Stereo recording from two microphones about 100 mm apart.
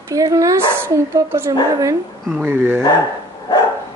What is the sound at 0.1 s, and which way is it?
A woman's voice, 35° right (ahead or behind).